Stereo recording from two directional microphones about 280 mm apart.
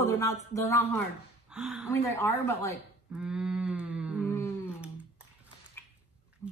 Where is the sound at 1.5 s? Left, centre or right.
Centre.